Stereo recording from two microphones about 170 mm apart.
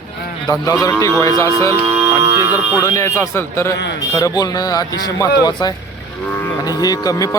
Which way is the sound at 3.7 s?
85° left.